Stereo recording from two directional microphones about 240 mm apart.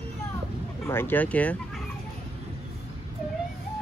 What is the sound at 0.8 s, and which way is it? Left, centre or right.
Speech, centre.